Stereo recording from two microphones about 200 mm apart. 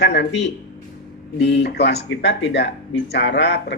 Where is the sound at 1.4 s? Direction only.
55° left (ahead or behind).